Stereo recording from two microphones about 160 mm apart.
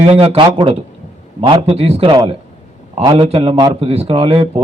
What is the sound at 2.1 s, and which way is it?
A man's voice, 25° right (ahead or behind).